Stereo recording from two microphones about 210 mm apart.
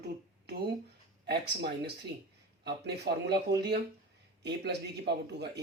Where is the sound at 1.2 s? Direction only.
50° right (ahead or behind).